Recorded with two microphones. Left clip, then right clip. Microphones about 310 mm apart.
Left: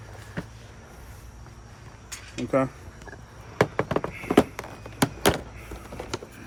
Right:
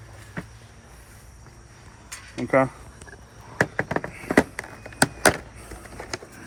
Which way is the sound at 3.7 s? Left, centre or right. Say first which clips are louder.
Even; centre.